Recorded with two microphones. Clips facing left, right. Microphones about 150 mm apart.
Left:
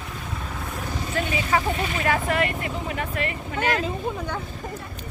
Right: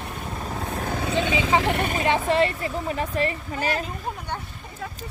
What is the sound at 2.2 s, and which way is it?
Speech, 30° right (ahead or behind).